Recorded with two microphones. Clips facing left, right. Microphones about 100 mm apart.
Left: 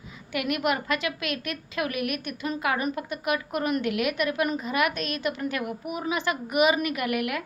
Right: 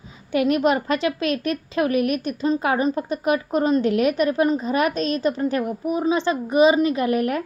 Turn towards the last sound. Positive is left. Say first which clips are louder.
# right 7 dB
turn(degrees=-35)  # may be behind; listen again after turning